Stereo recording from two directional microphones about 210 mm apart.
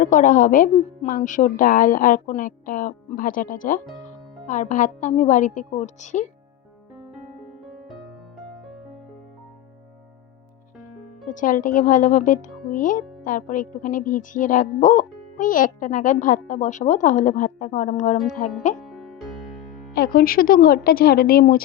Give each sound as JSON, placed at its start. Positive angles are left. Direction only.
{"t": 0.0, "sound": "speech", "side_deg": 40}
{"t": 11.3, "sound": "speech", "side_deg": 40}
{"t": 18.9, "sound": "music", "side_deg": 0}
{"t": 19.9, "sound": "a woman's voice", "side_deg": 45}